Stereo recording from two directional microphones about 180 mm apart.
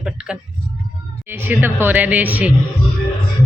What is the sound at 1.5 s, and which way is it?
Speech, 10° right (ahead or behind).